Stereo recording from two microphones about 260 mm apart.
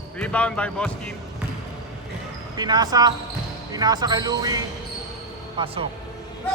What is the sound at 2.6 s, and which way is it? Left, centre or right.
Speech, centre.